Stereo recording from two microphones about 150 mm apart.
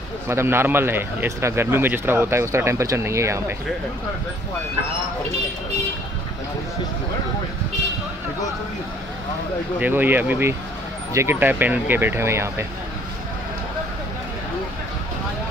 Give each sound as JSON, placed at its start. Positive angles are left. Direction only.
{"t": 0.3, "sound": "a man's voice", "side_deg": -15}
{"t": 9.8, "sound": "a man's voice", "side_deg": -10}